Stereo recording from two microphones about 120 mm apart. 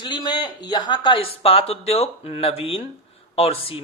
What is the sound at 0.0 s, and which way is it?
A man's voice, 40° left (ahead or behind).